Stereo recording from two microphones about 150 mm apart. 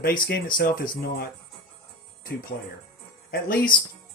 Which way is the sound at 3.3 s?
70° left (ahead or behind).